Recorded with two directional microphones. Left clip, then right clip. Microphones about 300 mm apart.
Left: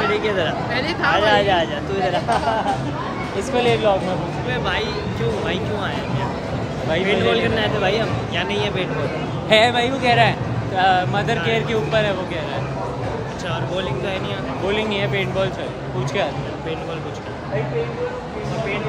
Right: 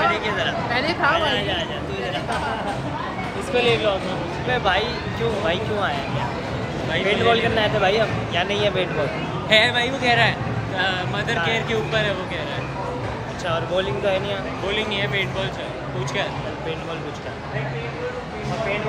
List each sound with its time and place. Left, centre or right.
0.1 s speech: centre
0.7 s speech: centre
1.3 s speech: centre
3.5 s speech: left
4.5 s speech: centre
7.1 s speech: centre
9.5 s speech: centre
13.5 s speech: centre
14.7 s speech: centre